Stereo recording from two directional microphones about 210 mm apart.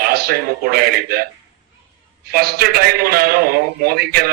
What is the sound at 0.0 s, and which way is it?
A man's voice, 50° right (ahead or behind).